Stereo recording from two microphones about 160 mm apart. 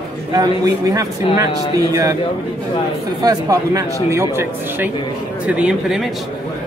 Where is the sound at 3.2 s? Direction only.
20° right (ahead or behind); by 6.0 s 5° right (ahead or behind).